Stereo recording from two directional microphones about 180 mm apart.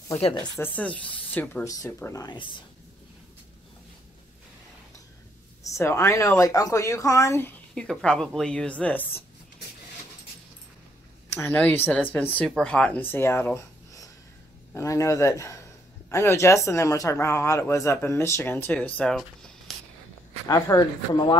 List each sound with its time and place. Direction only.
0.4 s speech: 10° left (ahead or behind)
5.6 s a woman's voice: 15° left (ahead or behind)
11.3 s speech: 10° left (ahead or behind)
20.4 s speech: 20° left (ahead or behind)